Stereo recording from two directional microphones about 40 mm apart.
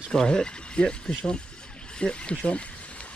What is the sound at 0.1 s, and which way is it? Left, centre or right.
Speech, centre.